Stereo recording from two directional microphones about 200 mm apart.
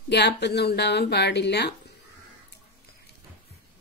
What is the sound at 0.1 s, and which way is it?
Speech, 55° left (ahead or behind).